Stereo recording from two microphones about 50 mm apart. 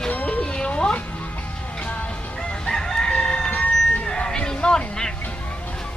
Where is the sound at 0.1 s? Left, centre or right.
Left.